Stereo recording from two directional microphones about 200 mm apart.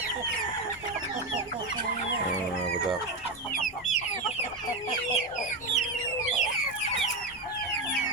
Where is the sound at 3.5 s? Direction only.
40° left (ahead or behind).